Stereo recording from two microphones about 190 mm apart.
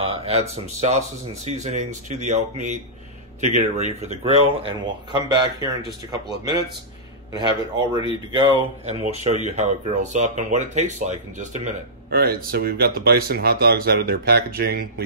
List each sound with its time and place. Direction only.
0.0 s speech: 30° right (ahead or behind)
7.3 s speech: 25° right (ahead or behind); by 11.7 s 40° right (ahead or behind)
12.1 s speech: 55° right (ahead or behind)